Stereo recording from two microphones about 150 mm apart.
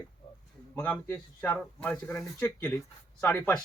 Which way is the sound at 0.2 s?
40° left (ahead or behind).